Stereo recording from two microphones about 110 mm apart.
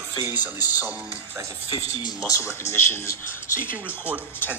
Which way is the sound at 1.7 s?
60° right (ahead or behind).